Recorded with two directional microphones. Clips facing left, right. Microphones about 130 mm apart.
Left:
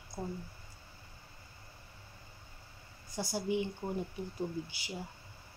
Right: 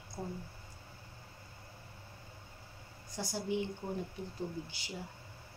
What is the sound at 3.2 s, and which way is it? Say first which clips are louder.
Speech: left 2 dB; 10° left (ahead or behind).